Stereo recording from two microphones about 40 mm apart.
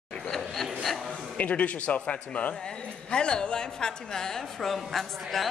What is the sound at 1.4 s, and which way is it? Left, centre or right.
A woman's voice, left.